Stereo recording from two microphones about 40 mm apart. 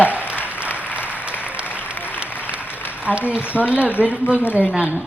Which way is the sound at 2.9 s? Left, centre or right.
Right.